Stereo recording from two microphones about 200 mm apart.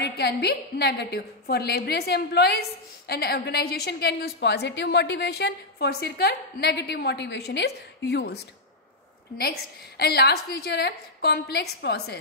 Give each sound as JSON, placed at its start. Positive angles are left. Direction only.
{"t": 0.0, "sound": "a woman's voice", "side_deg": 55}
{"t": 9.4, "sound": "a woman's voice", "side_deg": 50}